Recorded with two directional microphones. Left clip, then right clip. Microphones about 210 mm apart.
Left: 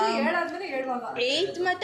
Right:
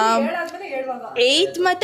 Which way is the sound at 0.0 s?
55° right (ahead or behind).